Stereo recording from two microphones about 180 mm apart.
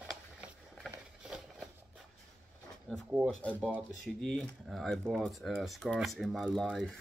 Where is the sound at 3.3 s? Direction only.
5° right (ahead or behind).